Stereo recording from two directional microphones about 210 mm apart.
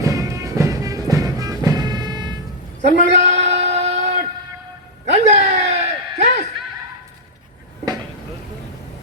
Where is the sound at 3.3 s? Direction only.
30° right (ahead or behind).